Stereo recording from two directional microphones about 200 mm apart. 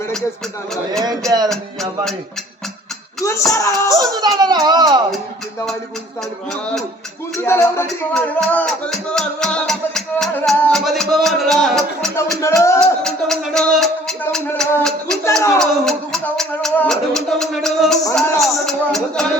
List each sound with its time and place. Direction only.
1.5 s music: centre (ahead or behind)
3.2 s music: 15° left (ahead or behind)
3.9 s speech: 15° right (ahead or behind)
7.3 s music: 15° left (ahead or behind)
7.9 s music: centre (ahead or behind)
12.4 s speech: 15° left (ahead or behind)
12.8 s speech: centre (ahead or behind)
15.5 s music: centre (ahead or behind)